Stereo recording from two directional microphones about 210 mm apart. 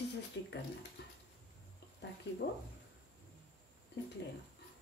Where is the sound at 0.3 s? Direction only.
60° left (ahead or behind).